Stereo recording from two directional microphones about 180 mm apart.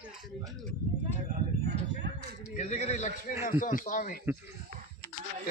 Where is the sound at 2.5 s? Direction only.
40° left (ahead or behind).